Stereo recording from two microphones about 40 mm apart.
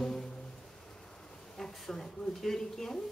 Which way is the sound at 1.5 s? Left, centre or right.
Centre.